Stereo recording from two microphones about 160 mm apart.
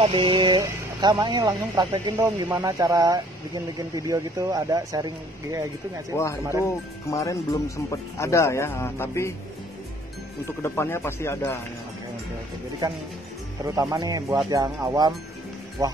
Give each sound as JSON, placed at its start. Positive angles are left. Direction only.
{"t": 0.0, "sound": "speech", "side_deg": -35}
{"t": 6.2, "sound": "speech", "side_deg": 15}
{"t": 10.6, "sound": "speech", "side_deg": 15}
{"t": 13.7, "sound": "speech", "side_deg": -20}